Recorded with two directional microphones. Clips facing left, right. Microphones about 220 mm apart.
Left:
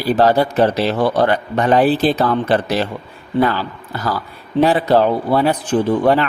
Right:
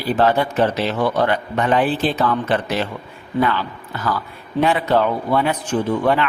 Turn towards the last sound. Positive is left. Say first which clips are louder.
# left 4 dB
turn(degrees=35)  # may be behind; listen again after turning